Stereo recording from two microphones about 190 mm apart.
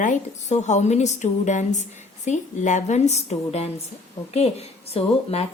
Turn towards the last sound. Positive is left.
turn(degrees=30)  # may be behind; listen again after turning